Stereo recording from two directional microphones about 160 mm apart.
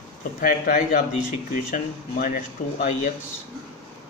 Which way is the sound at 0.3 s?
55° left (ahead or behind).